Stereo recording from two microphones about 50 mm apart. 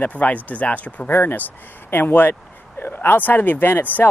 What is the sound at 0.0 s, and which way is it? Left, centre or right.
Speech, left.